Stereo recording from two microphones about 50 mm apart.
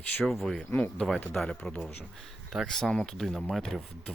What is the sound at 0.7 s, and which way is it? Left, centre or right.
Speech, left.